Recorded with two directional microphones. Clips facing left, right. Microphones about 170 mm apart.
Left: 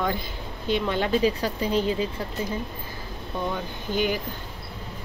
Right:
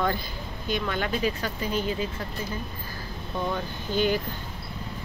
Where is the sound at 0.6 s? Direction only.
25° left (ahead or behind).